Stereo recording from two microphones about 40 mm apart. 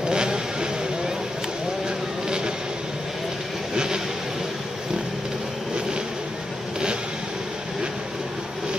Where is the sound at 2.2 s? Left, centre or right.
Centre.